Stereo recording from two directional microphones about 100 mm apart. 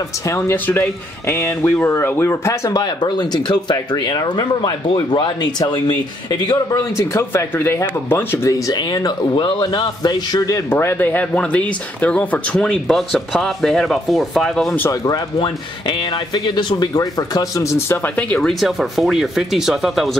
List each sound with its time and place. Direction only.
0.7 s speech: 25° left (ahead or behind)
2.7 s a man's voice: 45° left (ahead or behind)
6.7 s speech: 30° left (ahead or behind)
8.6 s a man's voice: 45° left (ahead or behind)
10.7 s speech: 25° left (ahead or behind)
12.8 s speech: centre (ahead or behind)
15.3 s speech: 55° left (ahead or behind); by 18.4 s 15° left (ahead or behind)
18.4 s speech: centre (ahead or behind)